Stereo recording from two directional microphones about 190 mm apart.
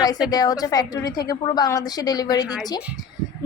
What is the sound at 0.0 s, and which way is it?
A woman's voice, 20° left (ahead or behind).